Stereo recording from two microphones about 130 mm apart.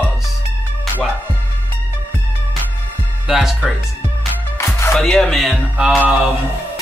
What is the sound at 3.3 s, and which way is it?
Speech, 5° right (ahead or behind).